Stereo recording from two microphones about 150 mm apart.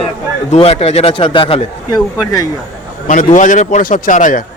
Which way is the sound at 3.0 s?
60° left (ahead or behind).